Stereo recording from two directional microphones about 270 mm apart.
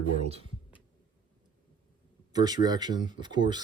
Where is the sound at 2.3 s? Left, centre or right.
Centre.